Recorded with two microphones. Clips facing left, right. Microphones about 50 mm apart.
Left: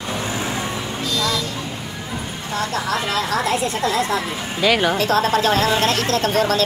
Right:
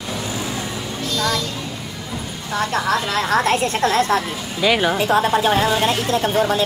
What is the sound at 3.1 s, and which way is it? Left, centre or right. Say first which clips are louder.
Speech: right 2 dB; right.